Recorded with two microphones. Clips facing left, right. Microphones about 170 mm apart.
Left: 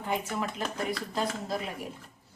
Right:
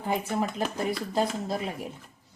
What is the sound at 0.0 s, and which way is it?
Speech, 35° right (ahead or behind).